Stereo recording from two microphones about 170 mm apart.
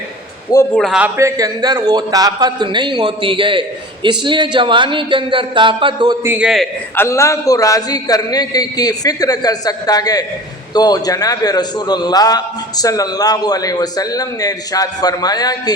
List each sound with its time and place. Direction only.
0.5 s a man's voice: 20° left (ahead or behind)
0.8 s a man's voice: 5° right (ahead or behind); by 6.1 s 25° right (ahead or behind)
6.2 s a man's voice: 10° right (ahead or behind)
6.9 s a man's voice: 15° left (ahead or behind)